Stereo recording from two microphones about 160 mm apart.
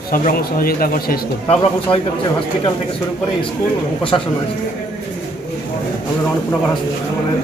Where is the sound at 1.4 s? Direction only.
40° left (ahead or behind).